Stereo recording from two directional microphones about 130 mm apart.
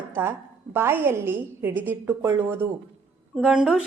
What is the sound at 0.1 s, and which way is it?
A woman's voice, 15° right (ahead or behind).